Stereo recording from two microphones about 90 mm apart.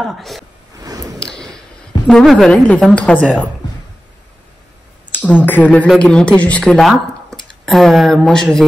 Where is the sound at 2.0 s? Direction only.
5° left (ahead or behind).